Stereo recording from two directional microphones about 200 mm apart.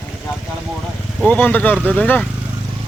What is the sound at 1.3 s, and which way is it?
Speech, 10° left (ahead or behind).